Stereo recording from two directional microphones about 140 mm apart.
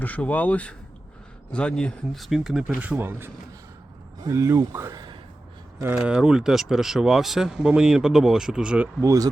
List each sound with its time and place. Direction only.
0.0 s speech: 10° left (ahead or behind); by 8.9 s 5° right (ahead or behind)
9.0 s speech: 25° right (ahead or behind)